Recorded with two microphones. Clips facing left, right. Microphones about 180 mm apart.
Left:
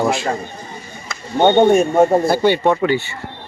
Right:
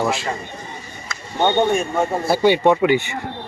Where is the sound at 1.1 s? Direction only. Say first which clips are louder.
Left 6 dB; 30° left (ahead or behind).